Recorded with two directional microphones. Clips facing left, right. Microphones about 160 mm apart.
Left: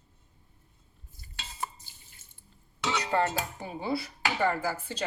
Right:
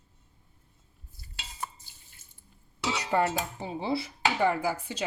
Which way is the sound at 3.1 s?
10° right (ahead or behind).